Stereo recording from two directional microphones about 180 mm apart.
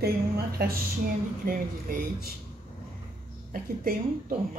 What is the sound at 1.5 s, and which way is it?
Speech, 55° right (ahead or behind).